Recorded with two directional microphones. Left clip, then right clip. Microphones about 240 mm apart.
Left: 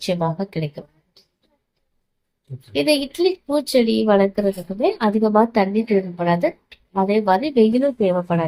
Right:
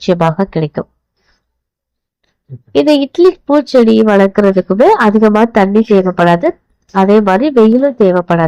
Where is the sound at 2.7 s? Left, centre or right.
Right.